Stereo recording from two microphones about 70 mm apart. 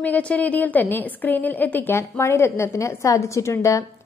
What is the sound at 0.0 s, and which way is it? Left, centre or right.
A woman's voice, centre.